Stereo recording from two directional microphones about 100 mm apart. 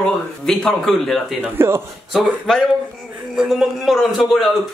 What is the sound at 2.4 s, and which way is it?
A man's voice, 5° left (ahead or behind).